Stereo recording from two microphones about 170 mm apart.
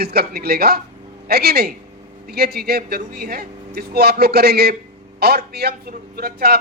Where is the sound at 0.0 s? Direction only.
65° right (ahead or behind).